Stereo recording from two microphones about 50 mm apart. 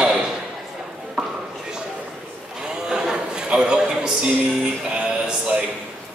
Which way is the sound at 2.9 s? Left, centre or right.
Centre.